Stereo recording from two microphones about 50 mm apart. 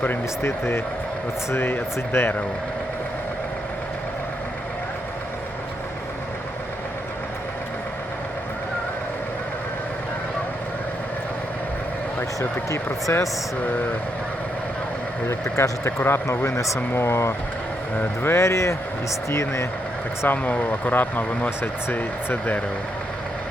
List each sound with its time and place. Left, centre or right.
0.4 s speech: left
1.5 s speech: left
12.4 s speech: left
15.3 s speech: left
16.9 s speech: left
18.2 s speech: left
19.3 s speech: left
20.2 s speech: left